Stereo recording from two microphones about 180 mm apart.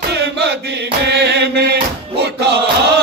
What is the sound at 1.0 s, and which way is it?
Mantra, 70° right (ahead or behind).